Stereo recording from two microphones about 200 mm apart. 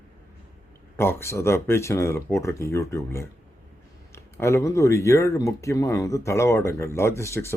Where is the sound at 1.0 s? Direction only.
15° left (ahead or behind).